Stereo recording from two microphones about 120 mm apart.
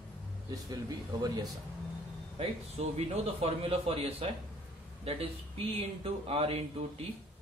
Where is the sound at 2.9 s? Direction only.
55° right (ahead or behind).